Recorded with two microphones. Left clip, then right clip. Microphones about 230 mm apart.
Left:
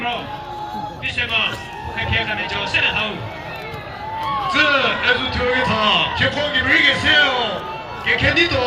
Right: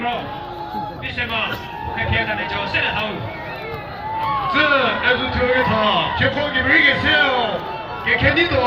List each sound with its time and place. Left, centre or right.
2.0 s speech: left
4.4 s speech: left